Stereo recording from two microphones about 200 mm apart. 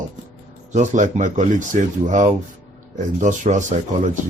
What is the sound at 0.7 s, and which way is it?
Speech, 35° right (ahead or behind).